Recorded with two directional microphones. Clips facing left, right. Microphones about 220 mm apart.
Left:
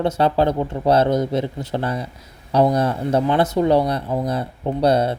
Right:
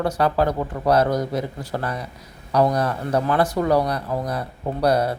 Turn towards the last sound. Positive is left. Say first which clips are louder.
# left 2 dB
turn(degrees=25)  # may be behind; listen again after turning